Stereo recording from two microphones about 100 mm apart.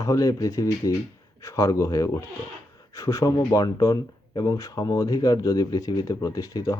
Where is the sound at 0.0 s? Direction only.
35° left (ahead or behind).